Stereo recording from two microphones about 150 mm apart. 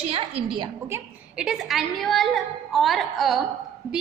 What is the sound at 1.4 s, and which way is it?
A woman's voice, 5° right (ahead or behind).